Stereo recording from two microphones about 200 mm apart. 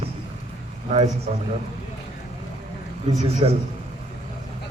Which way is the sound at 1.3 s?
35° right (ahead or behind).